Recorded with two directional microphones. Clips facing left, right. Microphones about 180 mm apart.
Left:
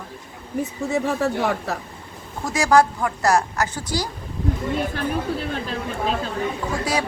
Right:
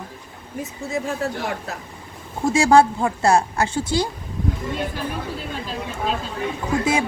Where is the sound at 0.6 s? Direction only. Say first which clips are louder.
Left 3 dB; 65° left (ahead or behind).